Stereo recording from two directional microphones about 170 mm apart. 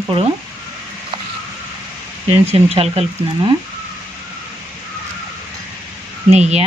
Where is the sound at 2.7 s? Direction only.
35° right (ahead or behind).